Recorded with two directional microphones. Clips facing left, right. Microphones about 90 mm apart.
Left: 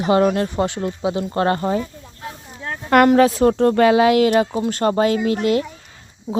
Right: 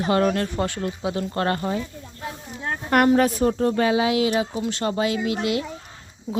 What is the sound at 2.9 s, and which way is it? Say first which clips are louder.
A woman's voice: left 5 dB; 90° left.